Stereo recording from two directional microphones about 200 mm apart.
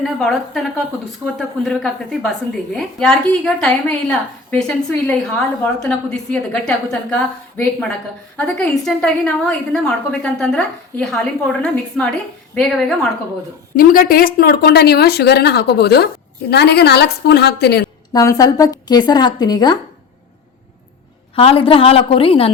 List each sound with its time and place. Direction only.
0.0 s a woman's voice: centre (ahead or behind)
13.7 s a woman's voice: 45° left (ahead or behind)
18.1 s a woman's voice: 15° left (ahead or behind)
21.3 s a woman's voice: 30° left (ahead or behind)